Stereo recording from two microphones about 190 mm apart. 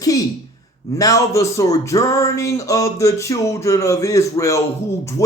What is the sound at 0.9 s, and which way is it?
Speech, 15° left (ahead or behind).